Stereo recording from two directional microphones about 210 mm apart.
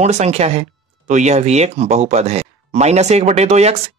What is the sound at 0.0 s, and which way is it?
Speech, 30° right (ahead or behind).